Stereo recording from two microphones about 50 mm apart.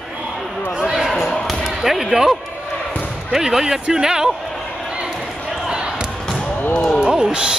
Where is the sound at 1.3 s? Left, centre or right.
Centre.